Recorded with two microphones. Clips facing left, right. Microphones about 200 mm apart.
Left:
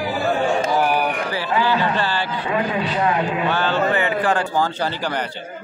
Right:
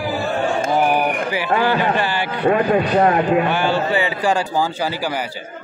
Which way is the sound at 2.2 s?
55° right (ahead or behind).